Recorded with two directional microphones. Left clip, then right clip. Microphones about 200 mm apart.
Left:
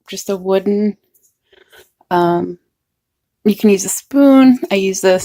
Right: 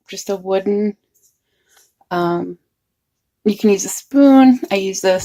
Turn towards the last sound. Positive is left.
turn(degrees=45)  # may be behind; listen again after turning